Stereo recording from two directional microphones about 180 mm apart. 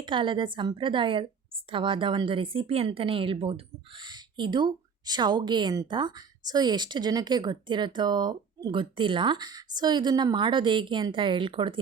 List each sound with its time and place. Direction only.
0.0 s speech: 25° right (ahead or behind)